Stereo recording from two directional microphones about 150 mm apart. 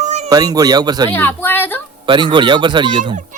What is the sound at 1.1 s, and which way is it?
Speech, 15° left (ahead or behind).